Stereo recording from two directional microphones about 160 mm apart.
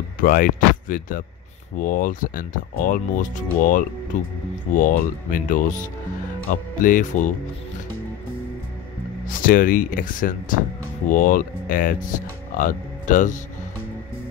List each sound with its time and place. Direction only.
0.2 s speech: 60° left (ahead or behind)
9.4 s speech: 60° left (ahead or behind)